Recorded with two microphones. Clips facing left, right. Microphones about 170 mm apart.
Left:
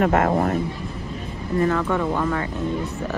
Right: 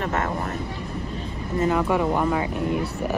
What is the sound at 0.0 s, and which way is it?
Speech, 40° left (ahead or behind).